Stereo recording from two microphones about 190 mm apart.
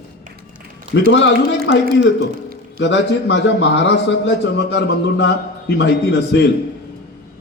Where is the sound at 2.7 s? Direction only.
70° left (ahead or behind).